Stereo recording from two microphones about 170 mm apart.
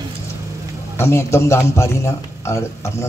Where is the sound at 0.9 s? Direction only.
15° left (ahead or behind).